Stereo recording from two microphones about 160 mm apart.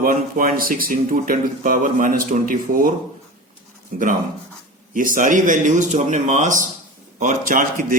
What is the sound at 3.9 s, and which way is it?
A man's voice, 55° right (ahead or behind).